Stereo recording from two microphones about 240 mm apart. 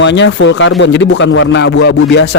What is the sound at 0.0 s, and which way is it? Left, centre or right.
Speech, left.